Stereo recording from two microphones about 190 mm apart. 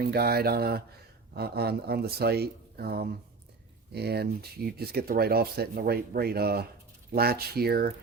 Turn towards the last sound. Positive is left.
turn(degrees=-55)  # may be behind; listen again after turning